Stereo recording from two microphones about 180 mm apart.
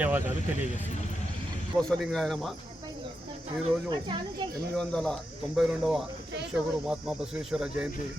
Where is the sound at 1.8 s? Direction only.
5° left (ahead or behind).